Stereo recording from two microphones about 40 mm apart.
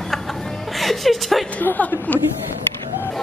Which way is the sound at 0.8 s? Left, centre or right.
Centre.